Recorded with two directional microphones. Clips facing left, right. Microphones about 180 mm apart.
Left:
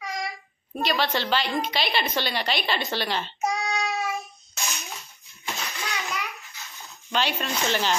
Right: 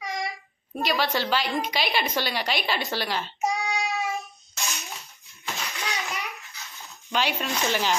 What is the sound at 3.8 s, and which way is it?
Child singing, centre (ahead or behind).